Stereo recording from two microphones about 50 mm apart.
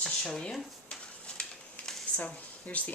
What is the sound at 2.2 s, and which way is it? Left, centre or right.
Speech, left.